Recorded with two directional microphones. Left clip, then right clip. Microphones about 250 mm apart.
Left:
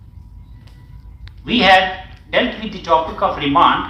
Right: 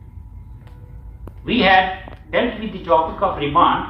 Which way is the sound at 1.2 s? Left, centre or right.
Left.